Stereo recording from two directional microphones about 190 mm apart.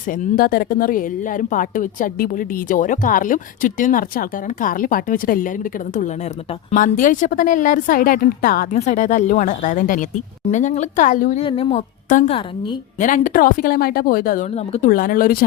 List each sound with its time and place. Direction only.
0.3 s a woman's voice: 50° left (ahead or behind)
6.7 s a woman's voice: 45° left (ahead or behind)
11.4 s speech: 30° left (ahead or behind)
12.0 s a woman's voice: 40° left (ahead or behind)